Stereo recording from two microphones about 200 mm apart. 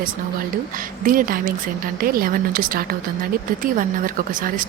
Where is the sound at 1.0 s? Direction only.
45° right (ahead or behind).